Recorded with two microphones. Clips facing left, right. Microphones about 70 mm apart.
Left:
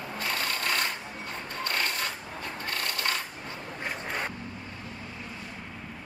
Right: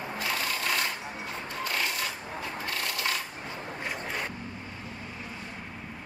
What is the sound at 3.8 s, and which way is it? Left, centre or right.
Vehicle, centre.